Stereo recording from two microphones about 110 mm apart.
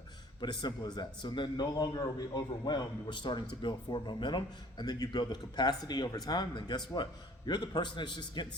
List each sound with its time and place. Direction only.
0.3 s a man's voice: 40° left (ahead or behind)